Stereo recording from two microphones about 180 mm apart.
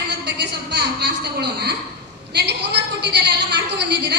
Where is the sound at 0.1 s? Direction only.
65° right (ahead or behind).